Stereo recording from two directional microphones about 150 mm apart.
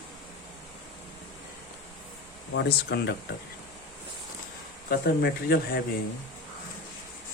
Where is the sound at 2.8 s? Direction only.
90° left.